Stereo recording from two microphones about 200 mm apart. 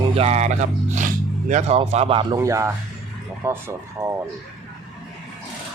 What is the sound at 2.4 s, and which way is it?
Speech, 15° right (ahead or behind).